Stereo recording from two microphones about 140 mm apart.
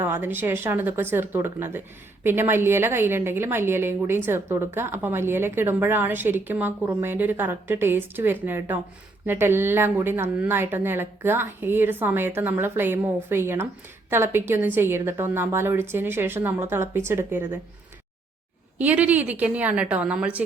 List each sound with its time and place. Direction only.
0.0 s a woman's voice: 15° right (ahead or behind)
18.8 s a woman's voice: 10° right (ahead or behind)